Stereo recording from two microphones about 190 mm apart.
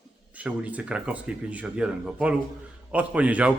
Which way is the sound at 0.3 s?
5° right (ahead or behind).